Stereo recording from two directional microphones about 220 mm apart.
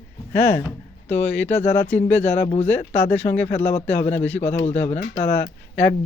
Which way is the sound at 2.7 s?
10° left (ahead or behind).